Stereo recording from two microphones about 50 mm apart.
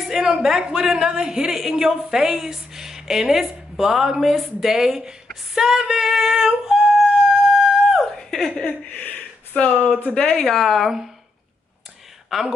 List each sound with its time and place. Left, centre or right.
0.2 s a woman's voice: centre
7.9 s chuckle: centre
8.6 s speech: left
10.1 s speech: left
10.4 s a woman's voice: centre
12.3 s speech: centre